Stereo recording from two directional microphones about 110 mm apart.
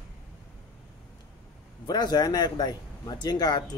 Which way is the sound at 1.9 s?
40° left (ahead or behind).